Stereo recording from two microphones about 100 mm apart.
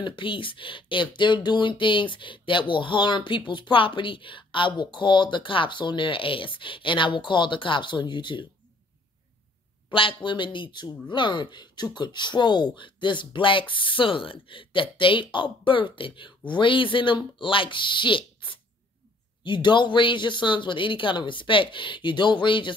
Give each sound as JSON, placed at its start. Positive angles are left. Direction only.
{"t": 0.0, "sound": "speech", "side_deg": 55}
{"t": 9.8, "sound": "speech", "side_deg": 60}